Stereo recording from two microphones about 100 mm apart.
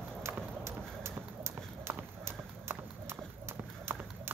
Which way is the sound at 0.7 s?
25° right (ahead or behind).